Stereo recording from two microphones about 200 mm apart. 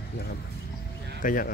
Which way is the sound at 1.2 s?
40° left (ahead or behind).